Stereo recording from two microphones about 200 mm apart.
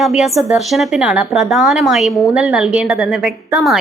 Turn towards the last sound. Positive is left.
turn(degrees=0)  # may be behind; listen again after turning